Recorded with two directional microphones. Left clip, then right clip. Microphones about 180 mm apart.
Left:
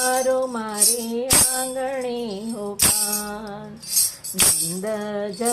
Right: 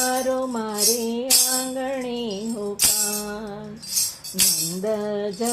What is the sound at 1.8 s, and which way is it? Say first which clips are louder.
Music: left 1 dB; 20° left (ahead or behind).